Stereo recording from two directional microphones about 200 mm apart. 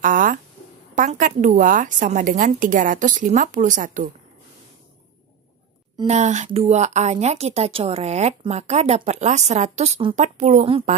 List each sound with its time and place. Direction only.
0.0 s a woman's voice: 40° right (ahead or behind)
6.0 s a woman's voice: 35° right (ahead or behind)